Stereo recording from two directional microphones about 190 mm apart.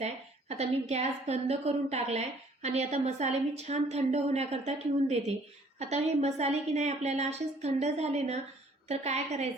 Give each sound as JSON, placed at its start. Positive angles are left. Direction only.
{"t": 0.0, "sound": "a woman's voice", "side_deg": -35}